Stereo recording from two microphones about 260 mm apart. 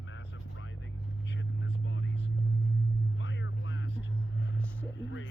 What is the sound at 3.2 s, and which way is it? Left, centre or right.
Music, left.